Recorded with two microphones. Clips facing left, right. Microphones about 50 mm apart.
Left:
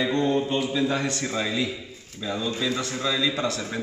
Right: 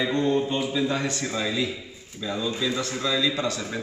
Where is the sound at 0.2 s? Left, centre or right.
Centre.